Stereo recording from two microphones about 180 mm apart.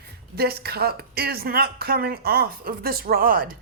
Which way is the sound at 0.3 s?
60° right (ahead or behind).